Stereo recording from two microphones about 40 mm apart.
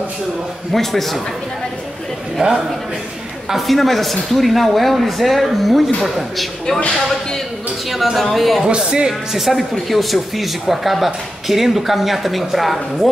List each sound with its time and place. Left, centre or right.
0.7 s speech: centre
2.4 s speech: right
3.4 s speech: centre
7.9 s speech: centre
8.6 s speech: right
9.3 s speech: centre